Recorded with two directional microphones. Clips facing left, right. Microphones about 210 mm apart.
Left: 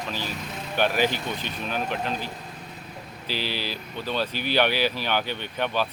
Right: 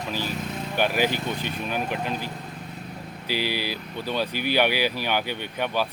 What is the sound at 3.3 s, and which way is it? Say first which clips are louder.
Speech: right 3 dB; 10° right (ahead or behind).